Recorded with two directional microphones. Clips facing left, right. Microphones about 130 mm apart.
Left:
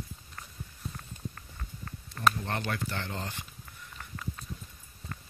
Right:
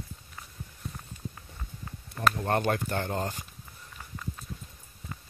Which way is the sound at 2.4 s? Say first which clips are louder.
Right 7 dB; 50° right (ahead or behind).